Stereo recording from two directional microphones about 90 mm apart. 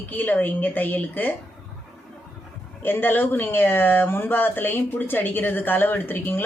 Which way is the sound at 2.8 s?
25° left (ahead or behind).